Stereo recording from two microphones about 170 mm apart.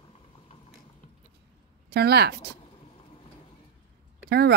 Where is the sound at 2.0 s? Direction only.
70° right (ahead or behind).